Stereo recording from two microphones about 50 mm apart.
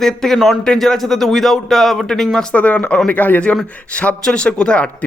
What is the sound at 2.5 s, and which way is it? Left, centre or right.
Speech, left.